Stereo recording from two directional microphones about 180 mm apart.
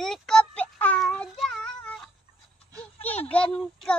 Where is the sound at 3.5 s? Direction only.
5° left (ahead or behind).